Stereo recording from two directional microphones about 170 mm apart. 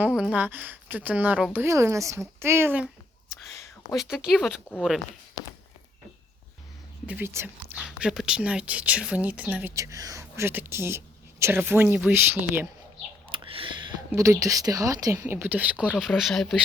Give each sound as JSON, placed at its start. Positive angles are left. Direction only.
{"t": 0.0, "sound": "speech", "side_deg": -5}
{"t": 3.9, "sound": "speech", "side_deg": -5}
{"t": 5.4, "sound": "walk", "side_deg": 20}
{"t": 7.1, "sound": "speech", "side_deg": -15}
{"t": 13.3, "sound": "a sound", "side_deg": -30}
{"t": 14.1, "sound": "speech", "side_deg": -20}